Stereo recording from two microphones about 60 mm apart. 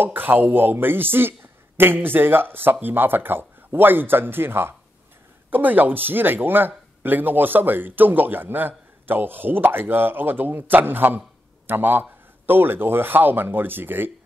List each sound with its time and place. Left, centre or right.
0.0 s a man's voice: right